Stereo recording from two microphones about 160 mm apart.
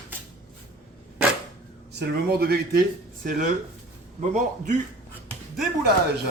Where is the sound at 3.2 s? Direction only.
60° right (ahead or behind).